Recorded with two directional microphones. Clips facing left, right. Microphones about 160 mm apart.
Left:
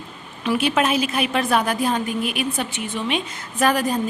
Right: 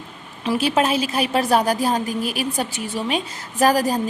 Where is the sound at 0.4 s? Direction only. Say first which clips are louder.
Right 1 dB; 35° right (ahead or behind).